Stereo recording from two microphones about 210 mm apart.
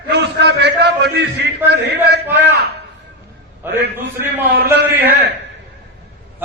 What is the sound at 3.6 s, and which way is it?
Speech, 10° right (ahead or behind).